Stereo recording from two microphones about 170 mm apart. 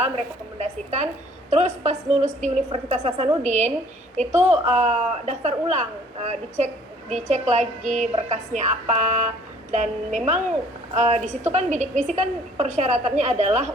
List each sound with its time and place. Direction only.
1.5 s a woman's voice: 40° right (ahead or behind)